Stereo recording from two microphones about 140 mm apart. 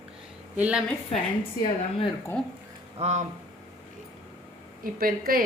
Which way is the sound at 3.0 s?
55° right (ahead or behind).